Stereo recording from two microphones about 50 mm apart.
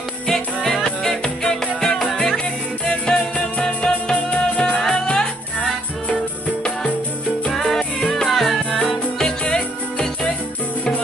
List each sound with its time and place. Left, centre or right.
0.3 s music: centre
7.5 s music: centre
8.7 s music: centre